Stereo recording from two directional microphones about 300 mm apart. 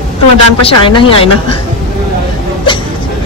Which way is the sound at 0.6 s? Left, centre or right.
Centre.